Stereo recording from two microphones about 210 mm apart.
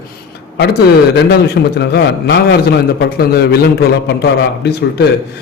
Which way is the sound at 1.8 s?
55° left (ahead or behind).